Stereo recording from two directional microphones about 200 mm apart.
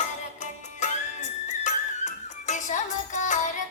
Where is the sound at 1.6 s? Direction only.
35° left (ahead or behind).